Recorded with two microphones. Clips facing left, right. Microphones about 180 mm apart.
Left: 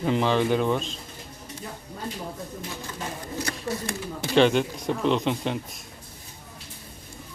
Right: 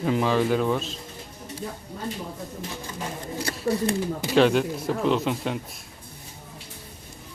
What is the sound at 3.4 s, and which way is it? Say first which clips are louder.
Speech: right 5 dB; 30° right (ahead or behind).